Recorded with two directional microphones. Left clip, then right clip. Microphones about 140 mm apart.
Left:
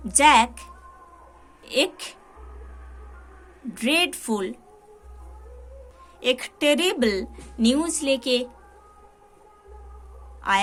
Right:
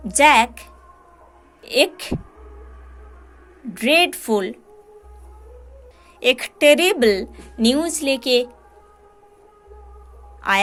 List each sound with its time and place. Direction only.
0.1 s a woman's voice: 30° right (ahead or behind)
3.8 s a woman's voice: 25° right (ahead or behind)
6.1 s a woman's voice: 35° right (ahead or behind)
10.4 s a woman's voice: 30° right (ahead or behind)